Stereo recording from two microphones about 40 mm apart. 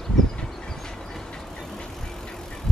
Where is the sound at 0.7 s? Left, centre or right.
Centre.